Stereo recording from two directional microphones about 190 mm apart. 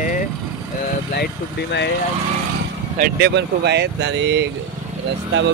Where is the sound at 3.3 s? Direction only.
60° right (ahead or behind).